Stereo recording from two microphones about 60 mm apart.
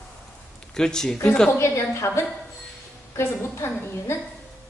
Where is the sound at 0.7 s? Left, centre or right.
Centre.